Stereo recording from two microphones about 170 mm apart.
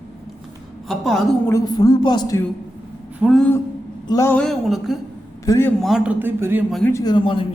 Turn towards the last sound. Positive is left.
turn(degrees=30)  # may be behind; listen again after turning